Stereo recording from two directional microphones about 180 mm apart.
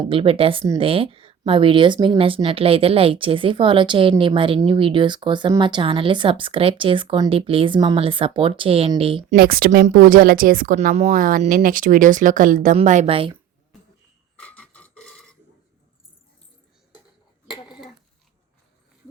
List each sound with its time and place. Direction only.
0.1 s speech: 30° right (ahead or behind)
9.3 s a woman's voice: 55° right (ahead or behind); by 13.3 s 30° right (ahead or behind)
14.3 s a sound: 5° left (ahead or behind)